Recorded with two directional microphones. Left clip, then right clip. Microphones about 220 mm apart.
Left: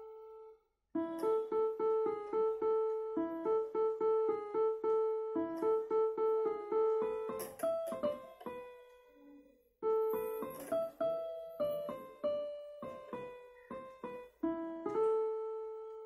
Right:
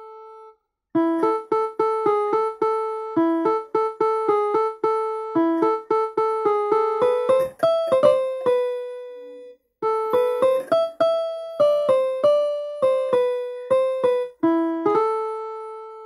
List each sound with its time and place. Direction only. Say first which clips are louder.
0.9 s music: right 14 dB; 45° right (ahead or behind)